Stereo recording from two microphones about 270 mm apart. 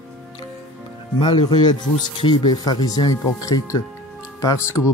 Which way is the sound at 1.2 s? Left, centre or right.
Centre.